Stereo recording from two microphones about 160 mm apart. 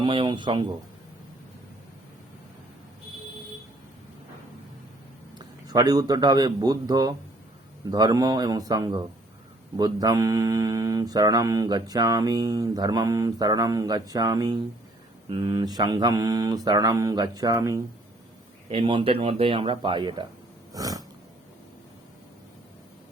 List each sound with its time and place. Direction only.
0.0 s speech: 30° right (ahead or behind)
5.4 s a man's voice: 25° right (ahead or behind)
18.7 s speech: 35° right (ahead or behind)
20.7 s a sound: 20° right (ahead or behind)